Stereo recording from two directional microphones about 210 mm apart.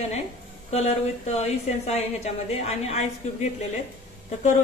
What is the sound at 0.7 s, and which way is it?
A woman's voice, 30° left (ahead or behind).